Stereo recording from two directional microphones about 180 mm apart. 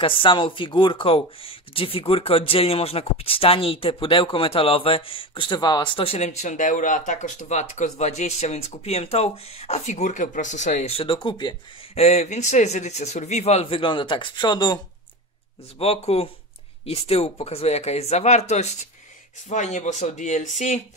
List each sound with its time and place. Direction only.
0.0 s speech: 30° left (ahead or behind)
15.8 s speech: 35° left (ahead or behind)